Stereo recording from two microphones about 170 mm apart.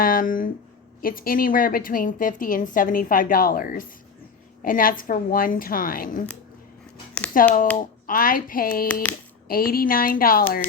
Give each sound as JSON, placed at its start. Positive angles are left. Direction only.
{"t": 0.0, "sound": "a woman's voice", "side_deg": 55}
{"t": 7.3, "sound": "a woman's voice", "side_deg": 55}